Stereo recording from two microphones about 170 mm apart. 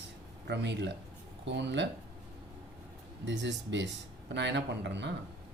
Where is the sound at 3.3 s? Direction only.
90° right.